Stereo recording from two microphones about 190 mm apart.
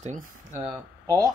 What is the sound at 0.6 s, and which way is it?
Speech, 20° right (ahead or behind).